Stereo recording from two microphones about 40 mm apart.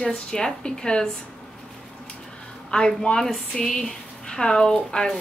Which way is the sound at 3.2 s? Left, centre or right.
Centre.